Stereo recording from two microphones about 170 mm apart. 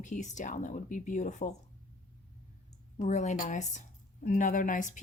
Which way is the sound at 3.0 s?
45° left (ahead or behind).